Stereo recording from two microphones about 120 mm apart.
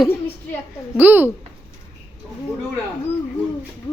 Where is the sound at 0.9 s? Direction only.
15° right (ahead or behind).